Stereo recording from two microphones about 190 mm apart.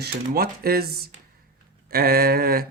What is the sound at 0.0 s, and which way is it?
A man's voice, 55° right (ahead or behind).